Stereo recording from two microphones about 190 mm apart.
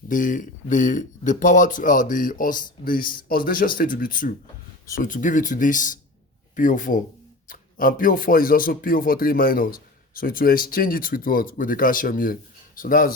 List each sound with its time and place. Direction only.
0.1 s speech: 45° left (ahead or behind)